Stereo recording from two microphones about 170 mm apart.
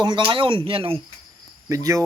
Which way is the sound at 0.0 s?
25° right (ahead or behind).